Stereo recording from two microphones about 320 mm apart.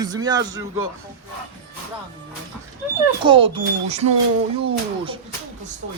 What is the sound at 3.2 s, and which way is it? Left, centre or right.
Speech, centre.